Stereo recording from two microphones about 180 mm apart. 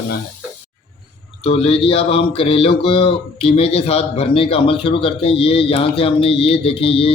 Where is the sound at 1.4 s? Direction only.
35° left (ahead or behind).